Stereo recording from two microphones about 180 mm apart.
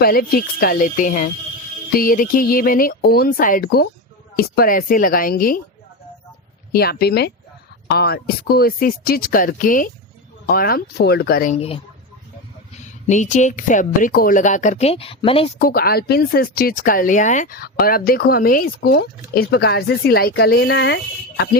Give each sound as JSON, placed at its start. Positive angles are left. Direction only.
{"t": 0.0, "sound": "speech", "side_deg": 55}
{"t": 6.7, "sound": "speech", "side_deg": 60}
{"t": 11.5, "sound": "speech", "side_deg": 35}
{"t": 15.5, "sound": "speech", "side_deg": 55}